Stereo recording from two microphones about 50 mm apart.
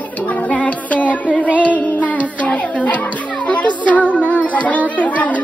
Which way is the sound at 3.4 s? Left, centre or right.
Left.